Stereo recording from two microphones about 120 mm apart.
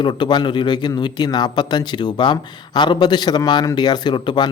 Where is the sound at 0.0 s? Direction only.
40° left (ahead or behind).